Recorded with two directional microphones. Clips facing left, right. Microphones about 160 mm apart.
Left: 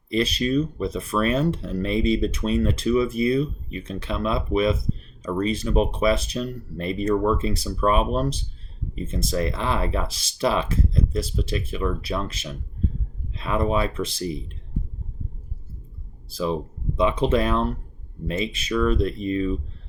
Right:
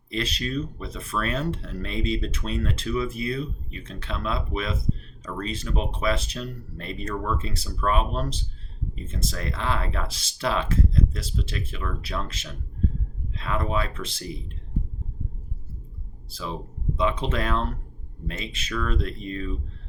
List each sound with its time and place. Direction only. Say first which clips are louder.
0.1 s speech: left 7 dB; 10° left (ahead or behind)
17.0 s speech: left 6 dB; 15° left (ahead or behind)